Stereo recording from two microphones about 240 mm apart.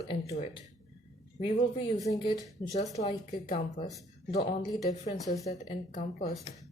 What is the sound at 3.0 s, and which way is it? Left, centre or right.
Speech, left.